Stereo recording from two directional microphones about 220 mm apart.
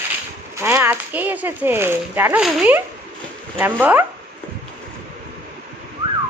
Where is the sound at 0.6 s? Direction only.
10° right (ahead or behind).